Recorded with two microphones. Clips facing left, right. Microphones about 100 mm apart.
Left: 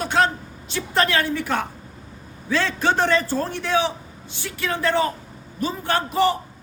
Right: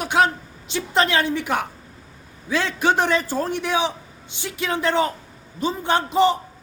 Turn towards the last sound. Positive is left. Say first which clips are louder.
# right 2 dB
turn(degrees=-20)  # may be behind; listen again after turning